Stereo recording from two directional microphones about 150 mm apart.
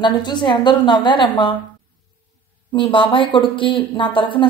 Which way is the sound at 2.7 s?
35° left (ahead or behind).